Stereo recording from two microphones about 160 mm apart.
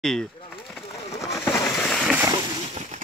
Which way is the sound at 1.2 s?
15° left (ahead or behind).